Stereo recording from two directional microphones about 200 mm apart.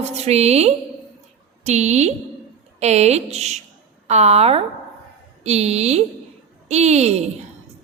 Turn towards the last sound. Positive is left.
turn(degrees=-35)  # may be behind; listen again after turning